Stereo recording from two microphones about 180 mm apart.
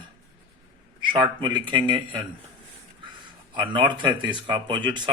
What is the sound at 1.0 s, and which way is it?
A man's voice, 25° right (ahead or behind).